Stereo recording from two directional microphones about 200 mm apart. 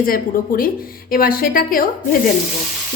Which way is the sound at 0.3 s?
45° left (ahead or behind).